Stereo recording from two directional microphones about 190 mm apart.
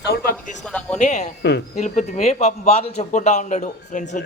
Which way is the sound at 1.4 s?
65° left (ahead or behind).